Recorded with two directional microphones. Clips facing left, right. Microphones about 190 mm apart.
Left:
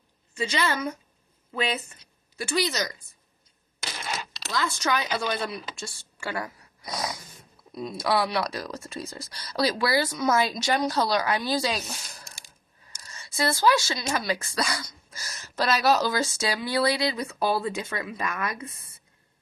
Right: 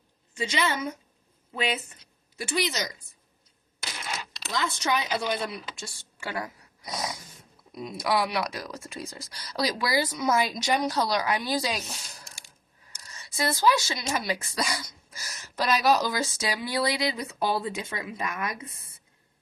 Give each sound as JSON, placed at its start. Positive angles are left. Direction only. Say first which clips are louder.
{"t": 0.3, "sound": "a woman's voice", "louder": "left 1 dB", "side_deg": -20}
{"t": 4.5, "sound": "a woman's voice", "louder": "left 1 dB", "side_deg": -20}
{"t": 12.9, "sound": "a sound", "louder": "left 1 dB", "side_deg": -15}
{"t": 14.1, "sound": "speech", "louder": "left 1 dB", "side_deg": -20}